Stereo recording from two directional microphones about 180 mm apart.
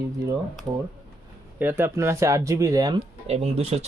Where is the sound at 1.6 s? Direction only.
15° right (ahead or behind).